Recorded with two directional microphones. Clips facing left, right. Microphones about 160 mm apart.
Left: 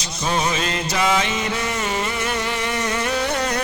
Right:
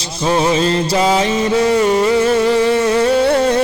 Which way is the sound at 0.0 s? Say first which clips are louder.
Right 7 dB; 30° right (ahead or behind).